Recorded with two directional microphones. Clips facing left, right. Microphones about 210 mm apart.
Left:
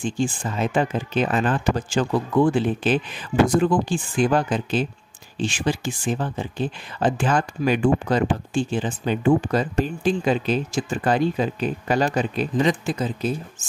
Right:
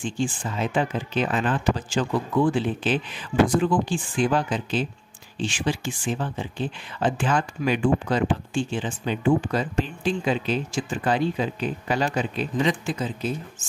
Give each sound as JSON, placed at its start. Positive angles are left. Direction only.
{"t": 0.0, "sound": "speech", "side_deg": 40}